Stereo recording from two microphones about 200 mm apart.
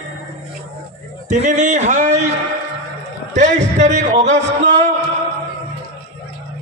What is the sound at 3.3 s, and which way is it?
Speech, 35° right (ahead or behind).